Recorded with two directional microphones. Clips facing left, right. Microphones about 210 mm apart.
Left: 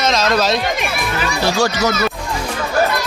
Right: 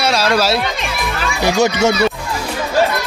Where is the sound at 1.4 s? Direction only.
20° right (ahead or behind).